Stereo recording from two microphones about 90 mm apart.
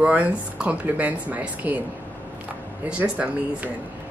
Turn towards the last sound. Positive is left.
turn(degrees=-15)  # may be behind; listen again after turning